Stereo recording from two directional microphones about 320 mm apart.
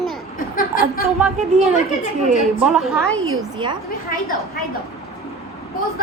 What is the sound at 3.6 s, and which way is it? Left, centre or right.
Speech, centre.